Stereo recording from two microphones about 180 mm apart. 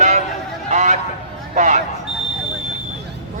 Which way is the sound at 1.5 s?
45° right (ahead or behind).